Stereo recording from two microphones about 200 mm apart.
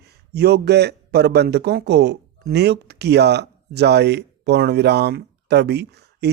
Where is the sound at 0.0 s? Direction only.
55° right (ahead or behind).